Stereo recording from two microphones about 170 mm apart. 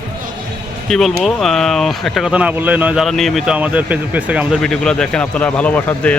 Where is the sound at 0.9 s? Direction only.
Centre (ahead or behind).